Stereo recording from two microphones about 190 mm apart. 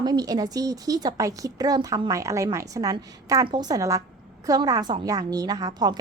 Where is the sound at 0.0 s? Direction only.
20° right (ahead or behind).